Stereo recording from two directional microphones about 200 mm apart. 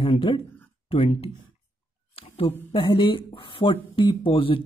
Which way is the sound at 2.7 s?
25° left (ahead or behind).